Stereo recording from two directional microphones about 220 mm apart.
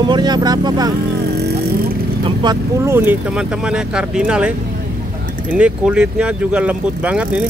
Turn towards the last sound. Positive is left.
turn(degrees=-5)  # may be behind; listen again after turning